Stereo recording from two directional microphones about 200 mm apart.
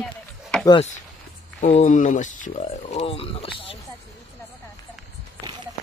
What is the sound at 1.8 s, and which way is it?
Speech, 40° left (ahead or behind).